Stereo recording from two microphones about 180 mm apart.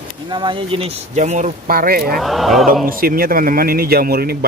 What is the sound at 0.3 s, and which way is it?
Speech, 25° right (ahead or behind).